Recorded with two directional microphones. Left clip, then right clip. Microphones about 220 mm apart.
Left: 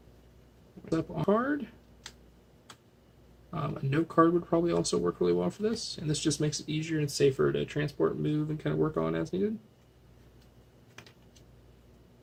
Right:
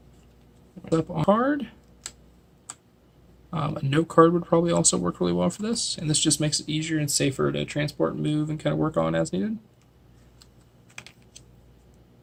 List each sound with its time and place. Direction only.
0.9 s speech: 45° right (ahead or behind)
3.5 s speech: 45° right (ahead or behind)